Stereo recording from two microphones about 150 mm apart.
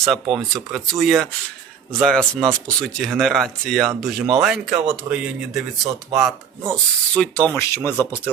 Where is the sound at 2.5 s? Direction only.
5° left (ahead or behind).